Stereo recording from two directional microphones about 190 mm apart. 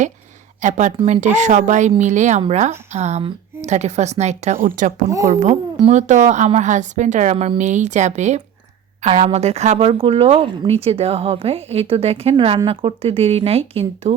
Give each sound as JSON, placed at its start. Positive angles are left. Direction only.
{"t": 0.6, "sound": "speech", "side_deg": -40}